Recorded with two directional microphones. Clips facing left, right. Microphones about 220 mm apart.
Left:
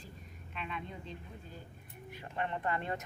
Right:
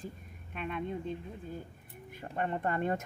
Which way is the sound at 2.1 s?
45° right (ahead or behind).